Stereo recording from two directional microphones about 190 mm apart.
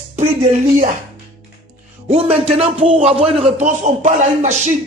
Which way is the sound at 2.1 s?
35° right (ahead or behind).